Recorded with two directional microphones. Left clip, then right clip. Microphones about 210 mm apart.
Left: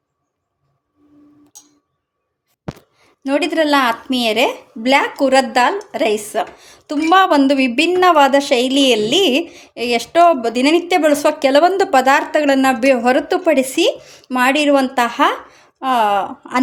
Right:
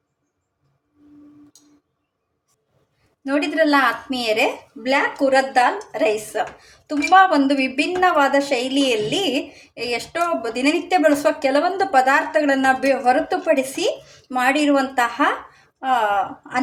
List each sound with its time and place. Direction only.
3.2 s a woman's voice: 40° left (ahead or behind)